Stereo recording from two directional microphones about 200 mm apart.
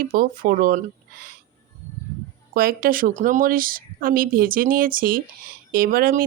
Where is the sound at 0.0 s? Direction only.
45° right (ahead or behind).